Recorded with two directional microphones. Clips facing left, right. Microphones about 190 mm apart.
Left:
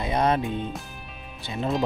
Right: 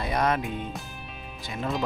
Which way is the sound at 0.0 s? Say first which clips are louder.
Left 3 dB; 25° left (ahead or behind).